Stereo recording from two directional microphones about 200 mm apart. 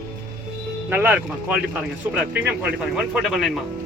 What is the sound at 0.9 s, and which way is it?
Speech, 10° right (ahead or behind).